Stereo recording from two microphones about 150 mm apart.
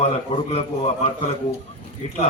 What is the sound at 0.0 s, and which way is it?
Speech, 40° left (ahead or behind).